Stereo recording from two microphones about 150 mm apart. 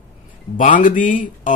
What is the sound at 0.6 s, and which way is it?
Speech, 60° left (ahead or behind).